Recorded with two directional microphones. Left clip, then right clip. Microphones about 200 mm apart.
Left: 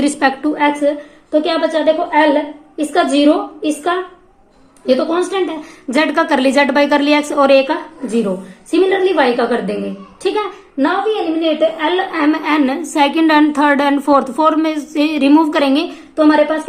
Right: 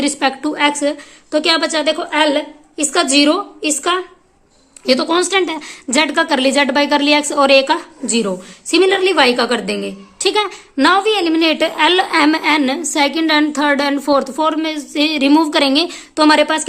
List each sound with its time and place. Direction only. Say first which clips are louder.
0.2 s a woman's voice: left 1 dB; 20° right (ahead or behind)
10.8 s a woman's voice: right 3 dB; 45° right (ahead or behind)